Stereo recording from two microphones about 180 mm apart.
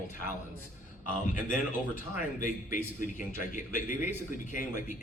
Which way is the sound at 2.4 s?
45° left (ahead or behind).